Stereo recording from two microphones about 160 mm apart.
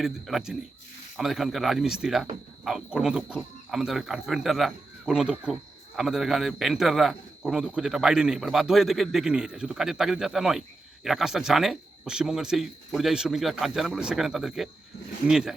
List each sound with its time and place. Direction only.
0.0 s a man's voice: centre (ahead or behind)